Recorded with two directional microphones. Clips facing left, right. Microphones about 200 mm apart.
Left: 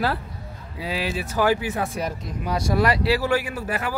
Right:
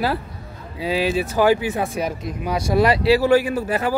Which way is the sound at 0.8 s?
25° right (ahead or behind).